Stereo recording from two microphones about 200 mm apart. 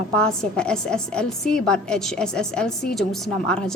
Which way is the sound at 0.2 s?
5° left (ahead or behind).